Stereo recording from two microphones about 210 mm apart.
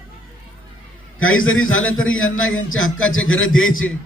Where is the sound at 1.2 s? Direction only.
70° left (ahead or behind).